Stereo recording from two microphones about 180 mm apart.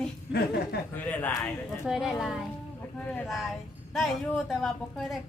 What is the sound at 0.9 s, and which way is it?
Speech, 10° left (ahead or behind).